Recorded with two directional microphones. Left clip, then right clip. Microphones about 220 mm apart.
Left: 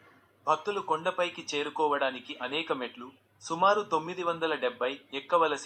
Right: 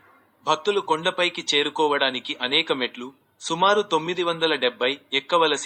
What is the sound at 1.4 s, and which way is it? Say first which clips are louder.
Speech: right 9 dB; 85° right.